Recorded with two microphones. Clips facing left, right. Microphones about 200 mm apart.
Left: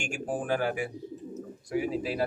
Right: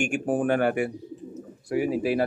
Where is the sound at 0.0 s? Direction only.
60° right (ahead or behind).